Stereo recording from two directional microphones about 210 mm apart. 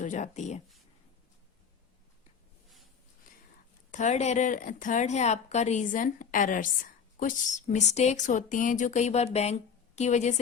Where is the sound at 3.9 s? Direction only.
35° left (ahead or behind).